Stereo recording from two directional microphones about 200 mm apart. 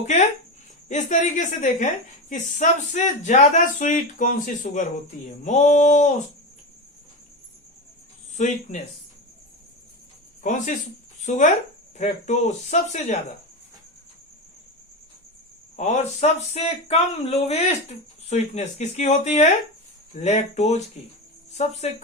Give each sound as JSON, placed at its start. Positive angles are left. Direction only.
{"t": 0.0, "sound": "speech", "side_deg": 35}
{"t": 8.4, "sound": "speech", "side_deg": 35}
{"t": 10.4, "sound": "speech", "side_deg": 40}
{"t": 15.7, "sound": "speech", "side_deg": 35}